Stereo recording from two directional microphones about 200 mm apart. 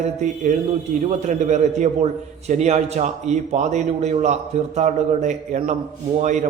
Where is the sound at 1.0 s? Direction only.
35° right (ahead or behind).